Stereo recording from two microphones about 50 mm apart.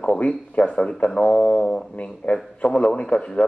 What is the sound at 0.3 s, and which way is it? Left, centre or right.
Speech, left.